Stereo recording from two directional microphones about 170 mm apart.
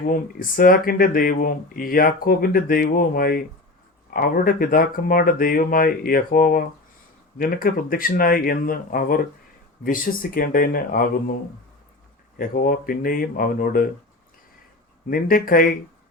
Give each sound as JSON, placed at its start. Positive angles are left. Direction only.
{"t": 0.1, "sound": "speech", "side_deg": 55}
{"t": 12.4, "sound": "speech", "side_deg": 55}
{"t": 15.1, "sound": "speech", "side_deg": 55}